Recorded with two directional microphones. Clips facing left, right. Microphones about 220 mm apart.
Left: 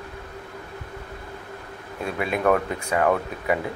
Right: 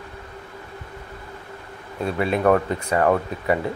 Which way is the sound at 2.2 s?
30° right (ahead or behind).